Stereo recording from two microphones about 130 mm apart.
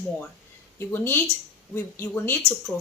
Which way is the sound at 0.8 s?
15° left (ahead or behind).